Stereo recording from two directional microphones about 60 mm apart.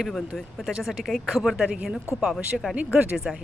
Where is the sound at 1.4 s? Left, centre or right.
Centre.